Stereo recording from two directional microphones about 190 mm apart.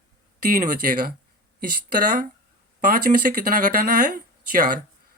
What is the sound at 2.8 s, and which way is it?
Speech, 50° right (ahead or behind).